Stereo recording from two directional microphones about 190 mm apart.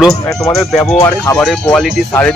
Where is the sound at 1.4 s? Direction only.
Centre (ahead or behind).